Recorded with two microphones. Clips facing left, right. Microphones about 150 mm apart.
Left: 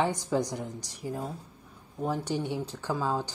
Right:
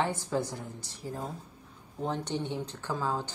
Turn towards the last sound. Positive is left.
turn(degrees=15)  # may be behind; listen again after turning